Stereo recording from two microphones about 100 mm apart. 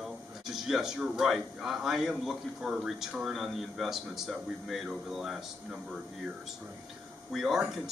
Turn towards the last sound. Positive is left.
turn(degrees=0)  # may be behind; listen again after turning